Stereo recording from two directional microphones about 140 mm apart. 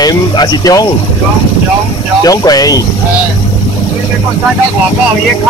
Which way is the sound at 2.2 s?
25° left (ahead or behind).